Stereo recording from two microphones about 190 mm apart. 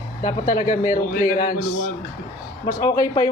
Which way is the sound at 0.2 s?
45° left (ahead or behind).